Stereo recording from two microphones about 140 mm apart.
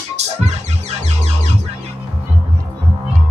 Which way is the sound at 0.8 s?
50° right (ahead or behind).